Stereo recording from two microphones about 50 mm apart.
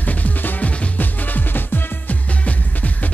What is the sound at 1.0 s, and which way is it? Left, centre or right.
Music, left.